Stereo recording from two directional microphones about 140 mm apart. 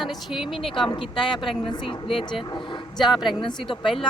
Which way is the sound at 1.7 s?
35° left (ahead or behind).